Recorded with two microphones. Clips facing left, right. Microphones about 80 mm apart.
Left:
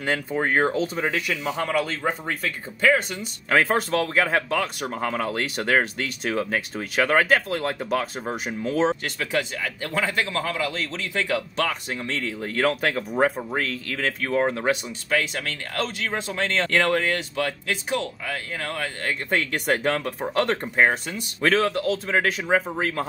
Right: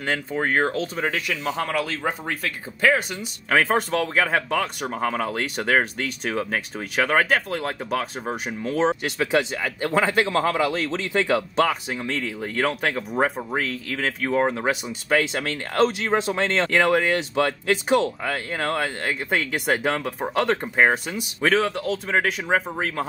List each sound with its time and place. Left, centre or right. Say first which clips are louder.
0.0 s speech: even; centre
9.0 s speech: right 4 dB; centre
10.3 s speech: right 5 dB; right
10.9 s speech: right 4 dB; right
11.9 s speech: right 1 dB; centre
15.4 s speech: right 7 dB; right
18.2 s speech: right 4 dB; right
19.0 s speech: even; centre